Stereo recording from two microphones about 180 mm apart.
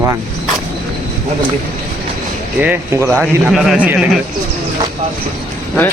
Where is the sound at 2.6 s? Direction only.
10° right (ahead or behind).